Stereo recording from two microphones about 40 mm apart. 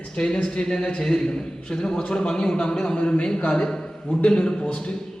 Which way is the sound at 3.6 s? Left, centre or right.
Centre.